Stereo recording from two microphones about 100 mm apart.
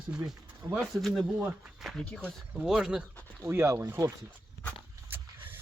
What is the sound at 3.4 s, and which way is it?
Speech, 25° right (ahead or behind).